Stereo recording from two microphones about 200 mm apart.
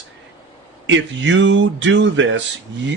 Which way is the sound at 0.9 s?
70° right (ahead or behind).